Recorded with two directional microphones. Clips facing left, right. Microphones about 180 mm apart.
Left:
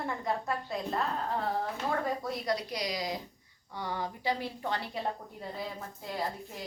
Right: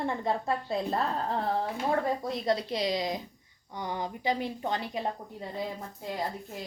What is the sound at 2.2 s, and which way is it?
A woman's voice, 25° right (ahead or behind).